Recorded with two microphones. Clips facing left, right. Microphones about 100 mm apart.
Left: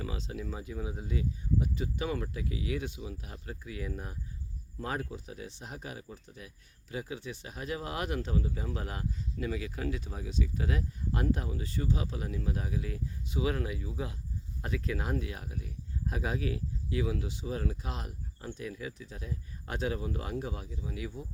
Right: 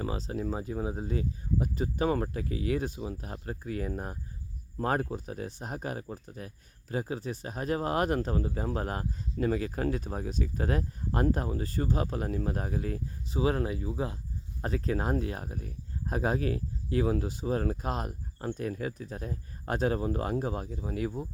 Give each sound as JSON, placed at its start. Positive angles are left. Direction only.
{"t": 0.0, "sound": "speech", "side_deg": -40}